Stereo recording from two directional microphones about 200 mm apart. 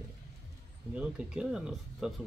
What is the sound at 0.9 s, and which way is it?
Speech, 5° right (ahead or behind).